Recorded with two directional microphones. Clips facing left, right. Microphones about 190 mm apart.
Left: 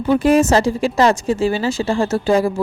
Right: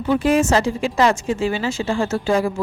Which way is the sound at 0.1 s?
45° left (ahead or behind).